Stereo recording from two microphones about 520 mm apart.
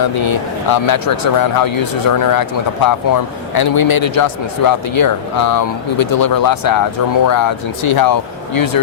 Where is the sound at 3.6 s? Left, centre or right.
Left.